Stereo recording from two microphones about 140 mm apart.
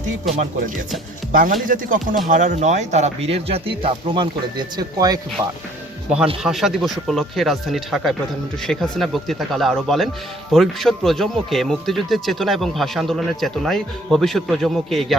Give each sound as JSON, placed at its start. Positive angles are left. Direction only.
{"t": 0.0, "sound": "music", "side_deg": -60}
{"t": 1.3, "sound": "speech", "side_deg": -80}
{"t": 2.3, "sound": "speech", "side_deg": -60}
{"t": 6.4, "sound": "speech", "side_deg": -5}